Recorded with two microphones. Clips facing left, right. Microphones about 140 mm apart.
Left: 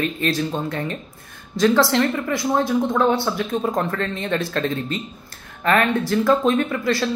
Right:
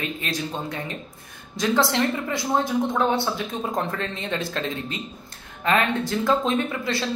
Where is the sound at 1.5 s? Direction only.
20° right (ahead or behind).